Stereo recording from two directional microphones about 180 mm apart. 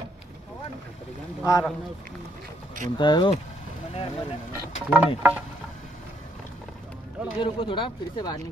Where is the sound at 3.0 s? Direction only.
25° left (ahead or behind).